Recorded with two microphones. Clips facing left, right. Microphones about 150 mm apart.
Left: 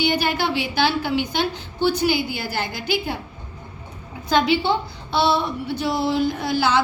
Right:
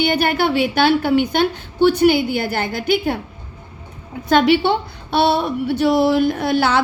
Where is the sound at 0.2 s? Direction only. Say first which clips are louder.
Right 6 dB; 55° right (ahead or behind).